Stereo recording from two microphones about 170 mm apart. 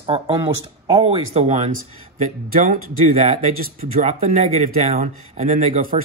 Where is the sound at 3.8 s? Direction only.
40° right (ahead or behind).